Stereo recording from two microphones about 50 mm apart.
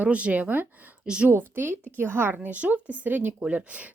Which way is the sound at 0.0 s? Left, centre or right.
Right.